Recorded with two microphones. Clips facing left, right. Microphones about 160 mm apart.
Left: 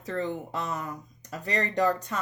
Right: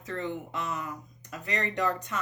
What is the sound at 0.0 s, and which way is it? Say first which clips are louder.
Speech: left 3 dB; 35° left (ahead or behind).